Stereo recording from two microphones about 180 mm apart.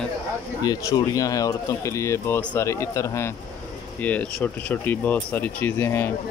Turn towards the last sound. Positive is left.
turn(degrees=10)  # may be behind; listen again after turning